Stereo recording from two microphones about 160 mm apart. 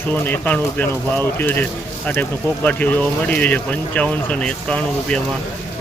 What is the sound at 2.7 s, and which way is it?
Speech, 10° left (ahead or behind).